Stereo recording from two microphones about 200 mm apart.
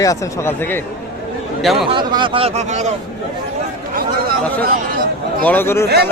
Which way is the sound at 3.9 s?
50° right (ahead or behind).